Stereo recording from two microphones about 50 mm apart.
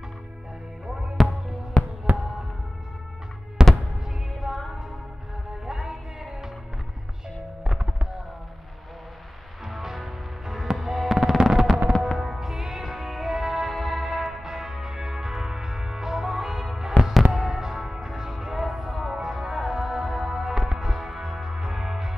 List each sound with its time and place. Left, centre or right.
1.2 s music: centre
2.1 s basketball bounce: right
3.6 s music: centre
5.7 s music: centre
9.7 s music: centre